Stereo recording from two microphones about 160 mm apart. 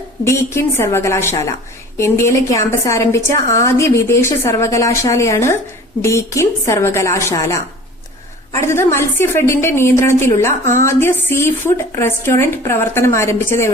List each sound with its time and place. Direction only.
0.3 s a woman's voice: 15° left (ahead or behind)
8.5 s a woman's voice: 15° left (ahead or behind)